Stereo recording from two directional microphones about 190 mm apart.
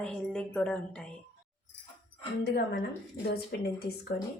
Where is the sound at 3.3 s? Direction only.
55° left (ahead or behind).